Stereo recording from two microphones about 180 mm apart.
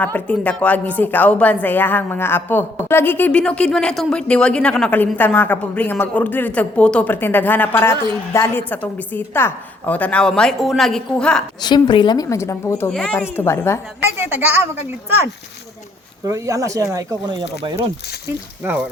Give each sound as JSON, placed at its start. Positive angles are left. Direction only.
{"t": 0.0, "sound": "a woman's voice", "side_deg": 10}
{"t": 11.6, "sound": "a woman's voice", "side_deg": 25}
{"t": 14.2, "sound": "speech", "side_deg": -10}
{"t": 18.6, "sound": "speech", "side_deg": -10}